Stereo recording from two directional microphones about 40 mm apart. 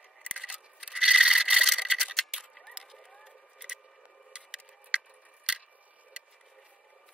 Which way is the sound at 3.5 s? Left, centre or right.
Right.